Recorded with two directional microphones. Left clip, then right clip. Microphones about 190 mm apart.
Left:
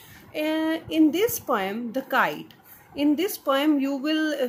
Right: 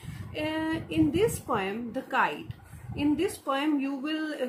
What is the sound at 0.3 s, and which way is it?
Speech, 45° left (ahead or behind).